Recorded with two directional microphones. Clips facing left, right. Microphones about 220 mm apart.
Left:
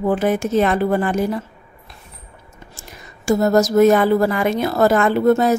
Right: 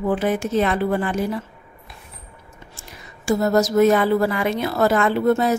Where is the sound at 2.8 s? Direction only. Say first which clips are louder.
Left 2 dB; 45° left (ahead or behind).